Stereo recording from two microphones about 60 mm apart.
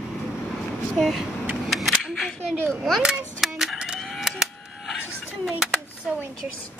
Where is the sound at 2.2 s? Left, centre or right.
Centre.